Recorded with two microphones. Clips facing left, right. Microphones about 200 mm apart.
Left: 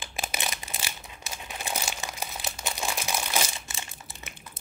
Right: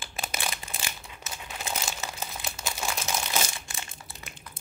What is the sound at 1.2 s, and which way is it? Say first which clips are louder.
Crumpling: left 1 dB; 15° left (ahead or behind).